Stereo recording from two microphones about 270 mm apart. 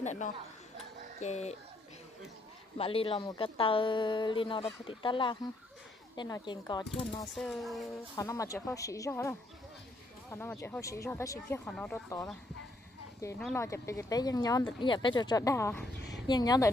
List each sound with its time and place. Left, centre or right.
0.0 s a sound: left
1.2 s speech: left
2.8 s speech: left
7.3 s speech: centre
8.2 s speech: centre
10.3 s speech: centre